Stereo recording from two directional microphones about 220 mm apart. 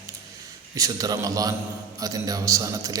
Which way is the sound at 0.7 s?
15° right (ahead or behind).